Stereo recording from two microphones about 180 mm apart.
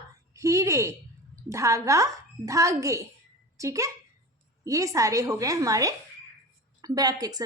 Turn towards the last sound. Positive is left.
turn(degrees=-20)  # may be behind; listen again after turning